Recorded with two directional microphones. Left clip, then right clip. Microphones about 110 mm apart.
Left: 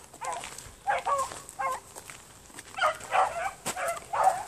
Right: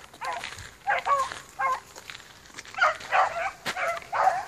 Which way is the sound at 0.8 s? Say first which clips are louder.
Right 2 dB; 30° right (ahead or behind).